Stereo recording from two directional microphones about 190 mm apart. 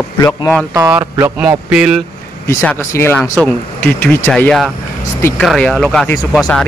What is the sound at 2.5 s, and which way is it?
Speech, 10° left (ahead or behind).